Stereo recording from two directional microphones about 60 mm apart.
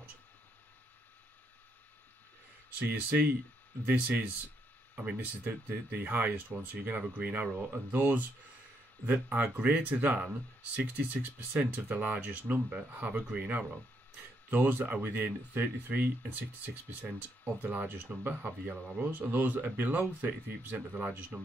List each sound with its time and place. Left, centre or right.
2.8 s speech: right